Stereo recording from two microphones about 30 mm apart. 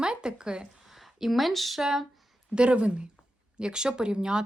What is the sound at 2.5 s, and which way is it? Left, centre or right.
Speech, right.